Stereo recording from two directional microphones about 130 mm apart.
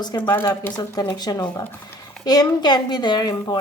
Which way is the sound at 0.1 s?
30° left (ahead or behind).